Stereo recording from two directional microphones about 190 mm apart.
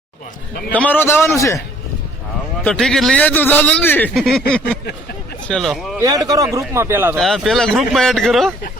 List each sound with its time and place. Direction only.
0.7 s a man's voice: 10° left (ahead or behind)
2.6 s a man's voice: 5° left (ahead or behind)
6.0 s a man's voice: 20° right (ahead or behind)
7.2 s speech: centre (ahead or behind)